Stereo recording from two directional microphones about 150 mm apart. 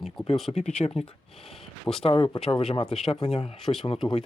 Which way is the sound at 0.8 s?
45° left (ahead or behind).